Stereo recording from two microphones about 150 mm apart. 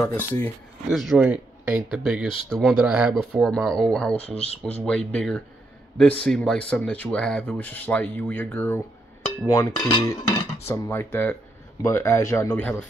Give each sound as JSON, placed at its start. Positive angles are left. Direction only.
{"t": 0.0, "sound": "speech", "side_deg": 15}
{"t": 0.8, "sound": "speech", "side_deg": -5}
{"t": 4.4, "sound": "speech", "side_deg": 45}
{"t": 4.7, "sound": "speech", "side_deg": 5}
{"t": 9.5, "sound": "a sound", "side_deg": 20}
{"t": 10.7, "sound": "speech", "side_deg": 15}